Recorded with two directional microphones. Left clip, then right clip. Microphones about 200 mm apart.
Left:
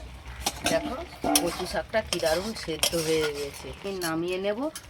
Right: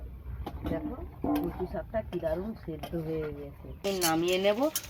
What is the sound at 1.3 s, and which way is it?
Stir, 35° left (ahead or behind).